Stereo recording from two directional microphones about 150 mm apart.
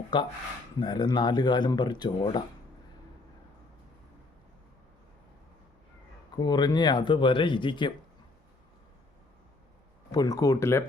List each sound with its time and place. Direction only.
0.1 s speech: 35° left (ahead or behind)
6.3 s speech: 30° left (ahead or behind)
10.1 s speech: 25° left (ahead or behind)